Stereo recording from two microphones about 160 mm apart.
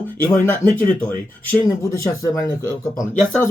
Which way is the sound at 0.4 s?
15° left (ahead or behind).